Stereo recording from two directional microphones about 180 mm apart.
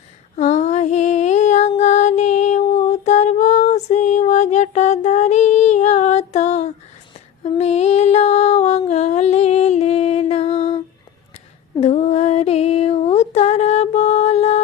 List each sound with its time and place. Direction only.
0.3 s female singing: 40° left (ahead or behind)
1.8 s music: 40° left (ahead or behind)
7.4 s a sound: 35° left (ahead or behind)
8.9 s music: 40° left (ahead or behind)
11.8 s female singing: 35° left (ahead or behind)